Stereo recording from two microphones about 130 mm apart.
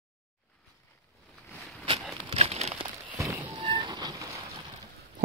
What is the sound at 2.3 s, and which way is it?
Crumpling, 50° right (ahead or behind).